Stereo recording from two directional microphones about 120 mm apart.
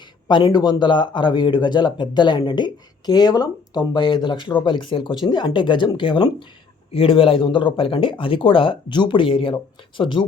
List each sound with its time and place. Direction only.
0.3 s speech: 40° left (ahead or behind)